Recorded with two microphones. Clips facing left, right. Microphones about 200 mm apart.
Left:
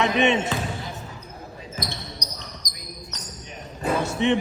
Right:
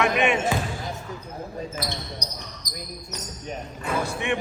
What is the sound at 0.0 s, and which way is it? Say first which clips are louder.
Speech: left 1 dB; 25° left (ahead or behind).